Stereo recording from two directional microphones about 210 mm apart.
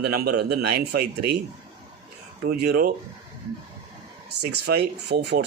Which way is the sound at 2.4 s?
50° right (ahead or behind).